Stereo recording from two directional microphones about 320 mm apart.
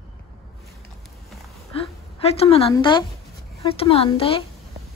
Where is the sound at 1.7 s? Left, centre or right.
Centre.